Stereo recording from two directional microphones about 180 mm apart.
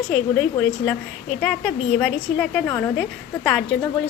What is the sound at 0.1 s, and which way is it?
A woman's voice, 5° left (ahead or behind).